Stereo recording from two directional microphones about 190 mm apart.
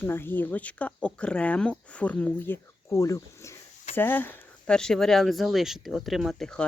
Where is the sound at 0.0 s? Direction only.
10° left (ahead or behind).